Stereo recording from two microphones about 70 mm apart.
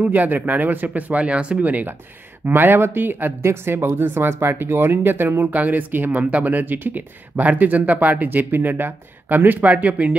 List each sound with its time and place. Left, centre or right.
0.0 s speech: right